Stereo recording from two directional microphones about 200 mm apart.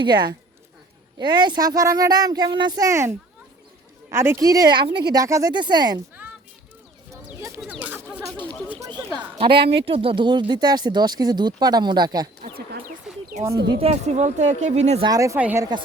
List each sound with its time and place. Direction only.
0.0 s speech: 20° right (ahead or behind)
7.8 s a sound: 10° right (ahead or behind)
9.1 s speech: 25° right (ahead or behind)
12.4 s a sound: 50° right (ahead or behind)
13.3 s speech: 35° right (ahead or behind)
15.0 s speech: 15° right (ahead or behind)